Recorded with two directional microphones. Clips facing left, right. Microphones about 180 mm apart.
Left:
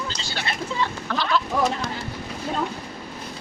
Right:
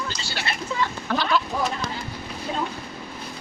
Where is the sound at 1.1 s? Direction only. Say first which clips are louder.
Right 4 dB; 10° right (ahead or behind).